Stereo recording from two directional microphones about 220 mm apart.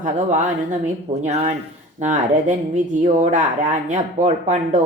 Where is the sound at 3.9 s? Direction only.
35° right (ahead or behind).